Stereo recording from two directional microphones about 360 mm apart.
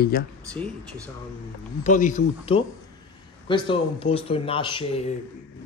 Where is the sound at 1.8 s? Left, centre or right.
Left.